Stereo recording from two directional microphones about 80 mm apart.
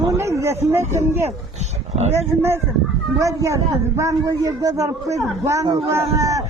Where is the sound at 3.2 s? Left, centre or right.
Right.